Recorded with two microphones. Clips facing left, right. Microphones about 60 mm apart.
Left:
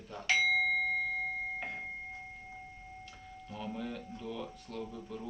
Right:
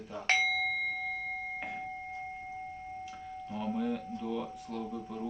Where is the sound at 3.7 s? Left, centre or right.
Centre.